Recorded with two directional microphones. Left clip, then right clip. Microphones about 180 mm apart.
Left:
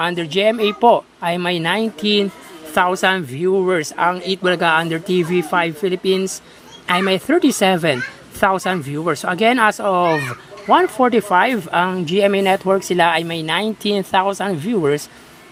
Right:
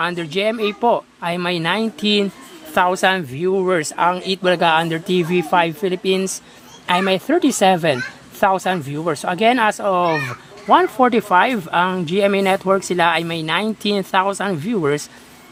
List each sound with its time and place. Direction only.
0.0 s speech: 5° left (ahead or behind)